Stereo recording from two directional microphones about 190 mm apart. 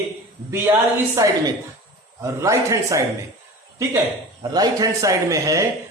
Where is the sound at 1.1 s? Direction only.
15° right (ahead or behind).